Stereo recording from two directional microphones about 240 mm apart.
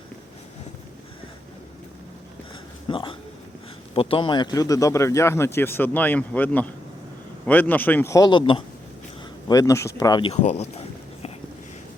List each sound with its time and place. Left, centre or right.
2.8 s a man's voice: left